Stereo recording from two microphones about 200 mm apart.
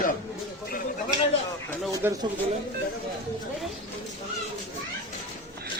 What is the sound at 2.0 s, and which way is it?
Speech, 10° right (ahead or behind).